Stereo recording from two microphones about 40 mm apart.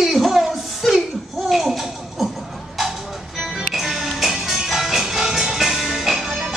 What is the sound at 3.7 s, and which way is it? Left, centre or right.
Music, centre.